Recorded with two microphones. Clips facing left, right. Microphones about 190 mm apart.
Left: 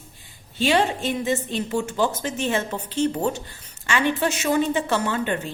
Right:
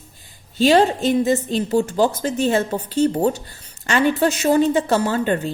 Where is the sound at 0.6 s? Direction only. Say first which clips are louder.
Right 6 dB; 40° right (ahead or behind).